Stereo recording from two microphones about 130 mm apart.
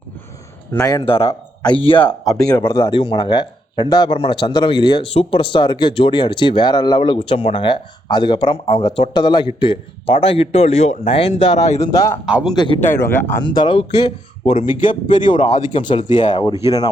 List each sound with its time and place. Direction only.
1.0 s speech: 45° left (ahead or behind)
2.5 s speech: 30° left (ahead or behind); by 11.9 s 55° left (ahead or behind)
11.9 s speech: 30° left (ahead or behind)
12.2 s a man's voice: 10° right (ahead or behind)
12.5 s speech: 40° left (ahead or behind)
12.9 s speech: 20° left (ahead or behind)
13.4 s speech: 35° left (ahead or behind)
14.8 s speech: 80° left
16.3 s speech: 35° left (ahead or behind)